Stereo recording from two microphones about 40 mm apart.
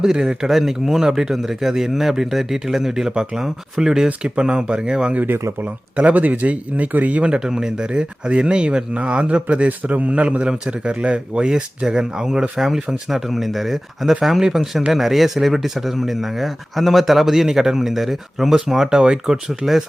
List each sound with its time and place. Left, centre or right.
0.0 s speech: centre
5.2 s speech: right
5.6 s speech: right
7.3 s speech: centre